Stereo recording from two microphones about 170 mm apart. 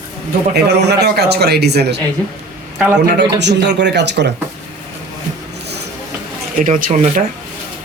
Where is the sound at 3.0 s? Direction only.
85° right.